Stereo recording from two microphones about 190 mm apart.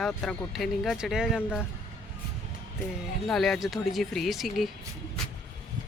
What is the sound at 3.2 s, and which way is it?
Speech, centre (ahead or behind).